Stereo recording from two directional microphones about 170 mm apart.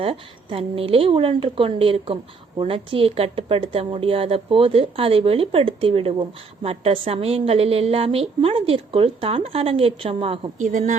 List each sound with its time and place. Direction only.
0.0 s a woman's voice: 35° right (ahead or behind)
10.6 s a woman's voice: 50° right (ahead or behind)